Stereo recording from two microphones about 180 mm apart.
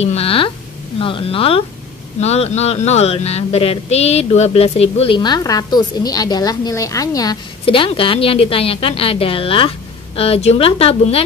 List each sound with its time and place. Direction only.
0.0 s speech: 35° left (ahead or behind)